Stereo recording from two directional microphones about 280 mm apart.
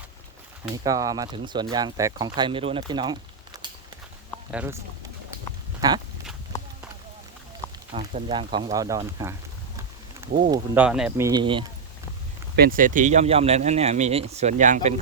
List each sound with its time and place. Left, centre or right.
0.7 s speech: centre
4.5 s speech: centre
5.8 s speech: centre
7.9 s speech: centre
10.5 s speech: centre
11.3 s speech: centre
12.5 s speech: right